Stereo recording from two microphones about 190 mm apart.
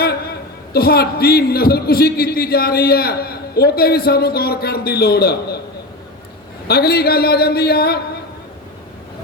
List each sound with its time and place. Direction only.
0.0 s a man's voice: 55° left (ahead or behind)
6.7 s a man's voice: 55° left (ahead or behind)